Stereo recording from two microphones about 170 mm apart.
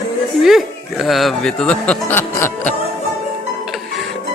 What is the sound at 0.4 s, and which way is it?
Speech, centre (ahead or behind).